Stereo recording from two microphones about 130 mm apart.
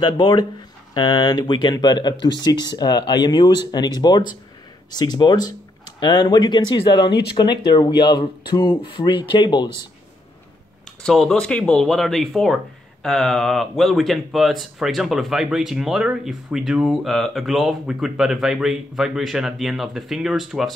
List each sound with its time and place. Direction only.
0.0 s speech: 40° left (ahead or behind)
11.0 s speech: 5° left (ahead or behind)